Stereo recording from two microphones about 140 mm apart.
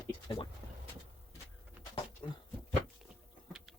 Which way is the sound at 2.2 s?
30° left (ahead or behind).